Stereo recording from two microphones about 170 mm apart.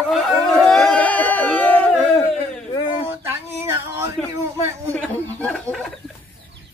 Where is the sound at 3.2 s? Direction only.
15° right (ahead or behind).